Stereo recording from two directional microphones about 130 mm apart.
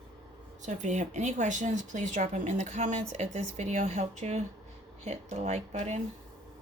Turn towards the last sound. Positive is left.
turn(degrees=-55)  # may be behind; listen again after turning